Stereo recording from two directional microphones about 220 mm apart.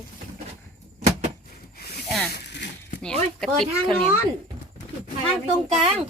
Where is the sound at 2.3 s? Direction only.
50° left (ahead or behind).